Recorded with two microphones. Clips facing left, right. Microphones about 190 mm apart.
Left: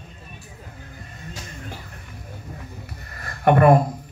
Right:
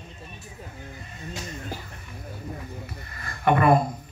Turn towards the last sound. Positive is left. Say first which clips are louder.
# left 5 dB
turn(degrees=55)  # may be behind; listen again after turning